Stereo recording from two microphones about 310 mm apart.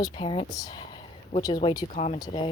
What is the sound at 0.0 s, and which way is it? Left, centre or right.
Speech, centre.